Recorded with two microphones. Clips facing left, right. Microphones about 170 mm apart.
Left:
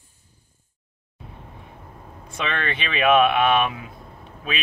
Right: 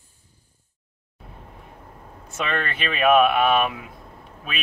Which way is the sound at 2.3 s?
5° right (ahead or behind).